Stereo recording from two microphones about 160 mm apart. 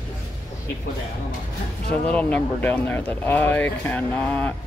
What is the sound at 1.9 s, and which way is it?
Speech, 10° left (ahead or behind).